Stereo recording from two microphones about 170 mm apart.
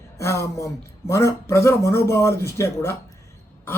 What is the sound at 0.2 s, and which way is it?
Speech, 15° left (ahead or behind).